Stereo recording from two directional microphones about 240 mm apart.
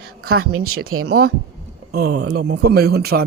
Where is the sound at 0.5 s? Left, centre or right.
Right.